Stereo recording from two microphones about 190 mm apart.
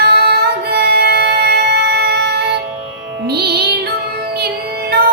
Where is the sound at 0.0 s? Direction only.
55° right (ahead or behind).